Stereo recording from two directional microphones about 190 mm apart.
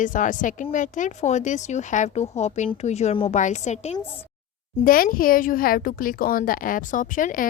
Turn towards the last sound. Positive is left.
turn(degrees=45)  # may be behind; listen again after turning